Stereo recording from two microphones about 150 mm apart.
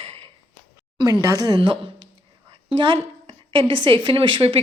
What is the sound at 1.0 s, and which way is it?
Speech, 25° right (ahead or behind).